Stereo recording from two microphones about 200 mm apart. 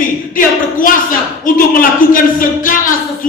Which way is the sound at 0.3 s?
45° left (ahead or behind).